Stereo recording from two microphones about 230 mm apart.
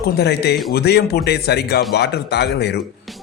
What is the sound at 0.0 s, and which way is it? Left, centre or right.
A man's voice, left.